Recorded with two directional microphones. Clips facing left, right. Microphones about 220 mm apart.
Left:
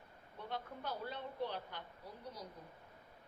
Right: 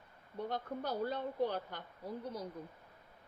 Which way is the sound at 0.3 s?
40° right (ahead or behind).